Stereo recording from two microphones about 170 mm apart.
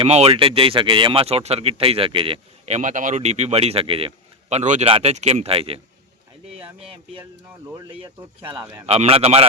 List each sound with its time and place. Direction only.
0.0 s speech: 35° right (ahead or behind)
8.9 s speech: 35° right (ahead or behind)